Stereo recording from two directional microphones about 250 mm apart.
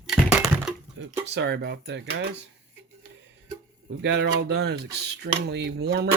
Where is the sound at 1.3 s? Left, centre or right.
Right.